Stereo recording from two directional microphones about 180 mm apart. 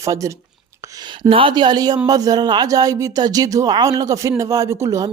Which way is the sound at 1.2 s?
30° right (ahead or behind).